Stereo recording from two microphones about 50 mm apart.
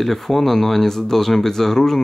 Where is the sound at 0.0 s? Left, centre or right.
Centre.